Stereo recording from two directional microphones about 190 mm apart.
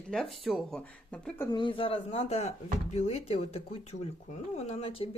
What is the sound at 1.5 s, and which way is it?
A man's voice, 25° left (ahead or behind).